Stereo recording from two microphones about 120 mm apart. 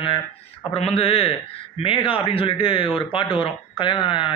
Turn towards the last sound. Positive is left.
turn(degrees=45)  # may be behind; listen again after turning